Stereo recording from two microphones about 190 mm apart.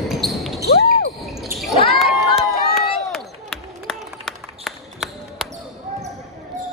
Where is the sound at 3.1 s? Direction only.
Centre (ahead or behind).